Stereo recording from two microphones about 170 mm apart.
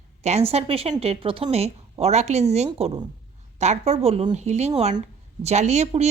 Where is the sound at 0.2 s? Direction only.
40° right (ahead or behind).